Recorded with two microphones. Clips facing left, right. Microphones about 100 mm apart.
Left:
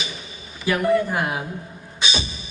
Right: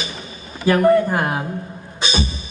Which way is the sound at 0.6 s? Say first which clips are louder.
Right 6 dB; 45° right (ahead or behind).